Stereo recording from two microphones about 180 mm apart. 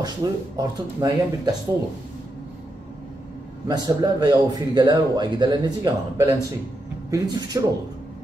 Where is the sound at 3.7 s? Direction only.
20° right (ahead or behind).